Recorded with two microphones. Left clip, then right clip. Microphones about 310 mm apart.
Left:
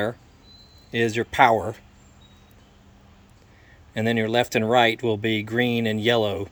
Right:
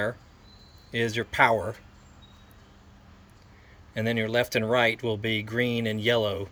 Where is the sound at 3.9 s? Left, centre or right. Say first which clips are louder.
Left 4 dB; centre.